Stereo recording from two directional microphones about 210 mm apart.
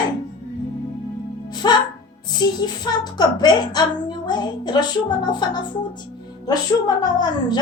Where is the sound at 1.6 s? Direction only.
20° left (ahead or behind).